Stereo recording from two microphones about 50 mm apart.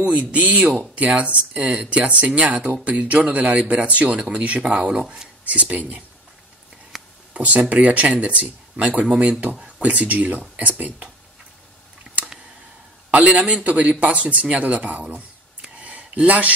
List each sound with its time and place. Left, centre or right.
0.3 s speech: right; by 5.3 s centre
5.4 s speech: right
6.9 s a sound: centre
7.3 s speech: right
13.1 s speech: right
13.7 s speech: right
15.8 s a sound: right